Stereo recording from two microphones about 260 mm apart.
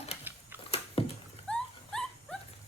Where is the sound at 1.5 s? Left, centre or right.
Centre.